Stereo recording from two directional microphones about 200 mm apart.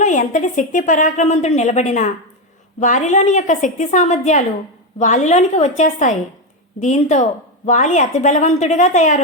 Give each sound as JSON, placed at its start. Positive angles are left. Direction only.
{"t": 0.0, "sound": "a woman's voice", "side_deg": 40}